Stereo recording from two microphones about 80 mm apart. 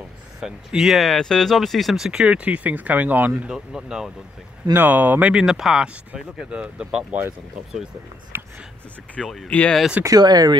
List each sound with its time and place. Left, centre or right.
0.4 s speech: centre
3.4 s speech: centre
4.7 s speech: right
5.3 s speech: centre
8.3 s speech: right
9.1 s speech: centre
10.0 s speech: right